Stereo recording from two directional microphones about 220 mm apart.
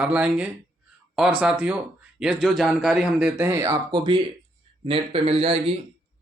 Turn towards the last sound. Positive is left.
turn(degrees=-25)  # may be behind; listen again after turning